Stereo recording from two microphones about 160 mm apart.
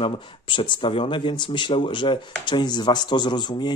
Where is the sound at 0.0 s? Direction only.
30° left (ahead or behind).